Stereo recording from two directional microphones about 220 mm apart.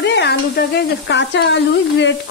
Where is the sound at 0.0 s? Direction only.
50° left (ahead or behind).